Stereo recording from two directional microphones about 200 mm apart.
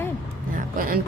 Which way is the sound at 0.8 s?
45° right (ahead or behind).